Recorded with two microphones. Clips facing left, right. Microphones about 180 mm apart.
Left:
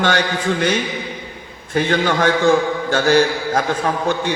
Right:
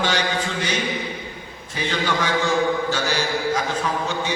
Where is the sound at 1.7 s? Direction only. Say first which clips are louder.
Left 7 dB; 55° left (ahead or behind).